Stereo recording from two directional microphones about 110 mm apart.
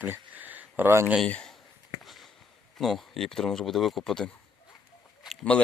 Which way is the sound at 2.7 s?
Centre (ahead or behind).